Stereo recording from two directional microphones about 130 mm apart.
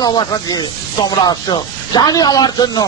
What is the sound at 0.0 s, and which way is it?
Speech, 30° left (ahead or behind).